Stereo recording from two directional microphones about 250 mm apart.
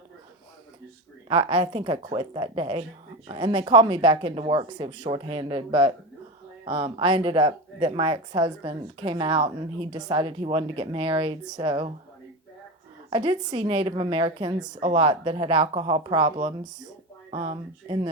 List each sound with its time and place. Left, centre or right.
1.3 s a woman's voice: right
13.1 s a woman's voice: centre